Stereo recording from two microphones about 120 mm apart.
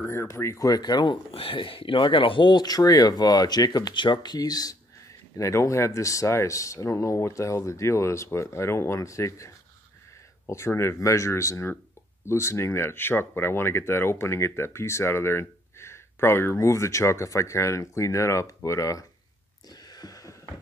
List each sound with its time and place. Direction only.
0.0 s speech: 20° left (ahead or behind)
1.3 s speech: 50° left (ahead or behind); by 19.0 s 25° left (ahead or behind)
19.7 s a sound: 35° left (ahead or behind)